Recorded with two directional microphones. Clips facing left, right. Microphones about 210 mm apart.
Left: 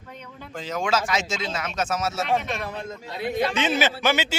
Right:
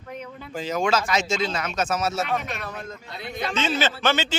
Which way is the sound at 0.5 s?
Centre (ahead or behind).